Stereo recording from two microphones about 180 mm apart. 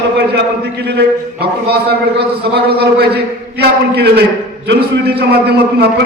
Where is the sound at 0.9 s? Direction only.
65° right (ahead or behind).